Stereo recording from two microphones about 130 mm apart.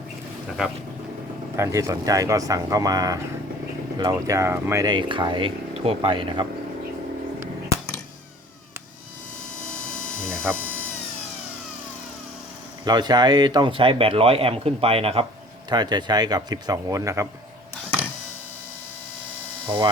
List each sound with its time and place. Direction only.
1.5 s speech: 20° right (ahead or behind)
4.9 s speech: 35° right (ahead or behind)
10.5 s speech: 15° right (ahead or behind)
12.8 s speech: 30° right (ahead or behind)
15.7 s speech: 35° right (ahead or behind)
19.6 s hum: 40° right (ahead or behind)